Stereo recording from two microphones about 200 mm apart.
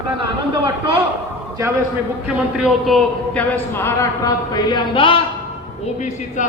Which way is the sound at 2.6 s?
Centre (ahead or behind).